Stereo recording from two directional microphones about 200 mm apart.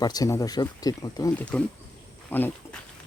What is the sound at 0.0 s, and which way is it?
Speech, 20° left (ahead or behind).